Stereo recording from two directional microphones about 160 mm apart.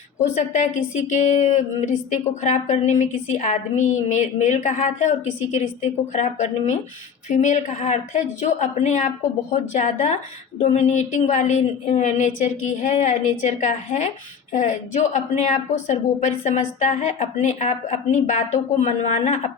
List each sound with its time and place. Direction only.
0.2 s speech: 50° left (ahead or behind)